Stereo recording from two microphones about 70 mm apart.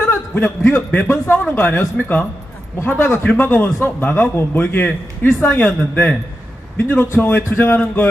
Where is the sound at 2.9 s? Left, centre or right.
Left.